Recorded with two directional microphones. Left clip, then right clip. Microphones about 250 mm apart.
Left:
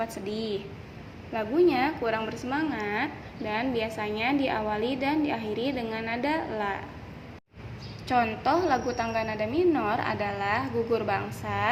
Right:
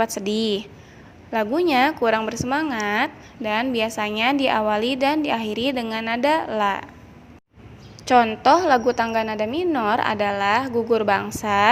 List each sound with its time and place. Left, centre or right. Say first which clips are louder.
0.0 s a woman's voice: right 10 dB; right
8.0 s a woman's voice: right 9 dB; right